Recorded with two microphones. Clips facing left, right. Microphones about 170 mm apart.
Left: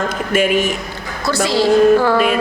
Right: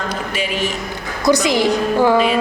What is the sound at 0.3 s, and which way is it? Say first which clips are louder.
Speech: left 8 dB; 50° left (ahead or behind).